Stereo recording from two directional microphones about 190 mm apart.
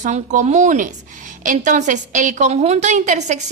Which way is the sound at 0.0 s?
40° right (ahead or behind).